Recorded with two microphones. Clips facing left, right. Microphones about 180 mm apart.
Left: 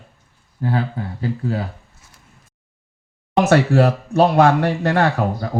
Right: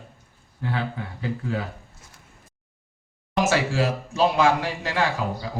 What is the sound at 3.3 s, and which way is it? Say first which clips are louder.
Speech: left 8 dB; 60° left (ahead or behind).